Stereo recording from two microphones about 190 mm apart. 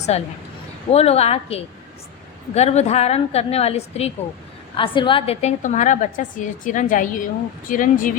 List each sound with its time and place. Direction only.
0.1 s a woman's voice: 35° left (ahead or behind)